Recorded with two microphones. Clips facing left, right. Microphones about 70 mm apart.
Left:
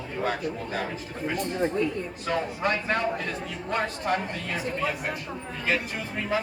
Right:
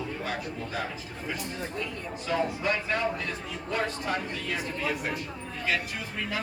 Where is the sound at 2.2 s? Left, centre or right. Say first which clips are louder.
Left 1 dB; left.